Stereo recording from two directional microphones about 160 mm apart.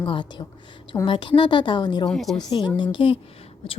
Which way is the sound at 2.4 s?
25° left (ahead or behind).